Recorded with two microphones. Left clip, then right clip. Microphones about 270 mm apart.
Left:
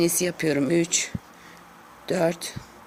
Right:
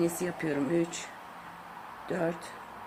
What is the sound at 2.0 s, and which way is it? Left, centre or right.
Speech, left.